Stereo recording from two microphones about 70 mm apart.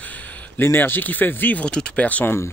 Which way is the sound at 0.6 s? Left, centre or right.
Left.